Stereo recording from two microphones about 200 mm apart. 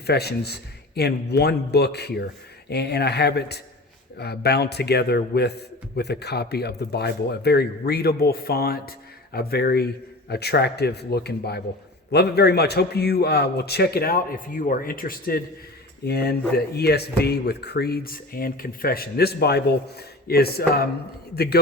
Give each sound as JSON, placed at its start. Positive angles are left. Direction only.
{"t": 0.0, "sound": "a man's voice", "side_deg": 55}